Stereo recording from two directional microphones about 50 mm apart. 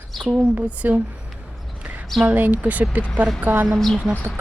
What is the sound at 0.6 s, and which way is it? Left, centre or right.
Speech, right.